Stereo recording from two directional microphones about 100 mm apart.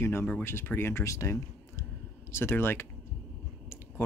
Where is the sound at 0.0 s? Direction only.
25° left (ahead or behind).